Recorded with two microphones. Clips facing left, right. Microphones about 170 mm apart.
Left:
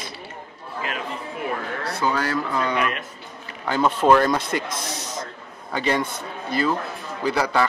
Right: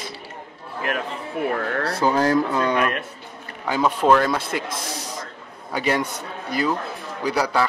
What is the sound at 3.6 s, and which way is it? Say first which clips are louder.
A man's voice: even; 10° right (ahead or behind).